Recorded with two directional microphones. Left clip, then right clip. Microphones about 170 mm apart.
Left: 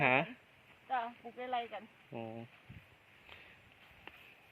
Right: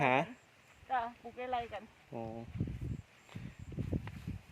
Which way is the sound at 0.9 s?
10° right (ahead or behind).